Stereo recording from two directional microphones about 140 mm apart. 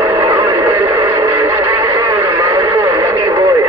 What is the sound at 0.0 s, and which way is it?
Radio, 20° right (ahead or behind).